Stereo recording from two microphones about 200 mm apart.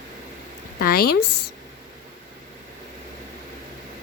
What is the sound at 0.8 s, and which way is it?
Speech, 50° left (ahead or behind).